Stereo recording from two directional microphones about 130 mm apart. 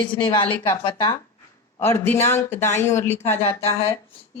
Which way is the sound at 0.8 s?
35° left (ahead or behind).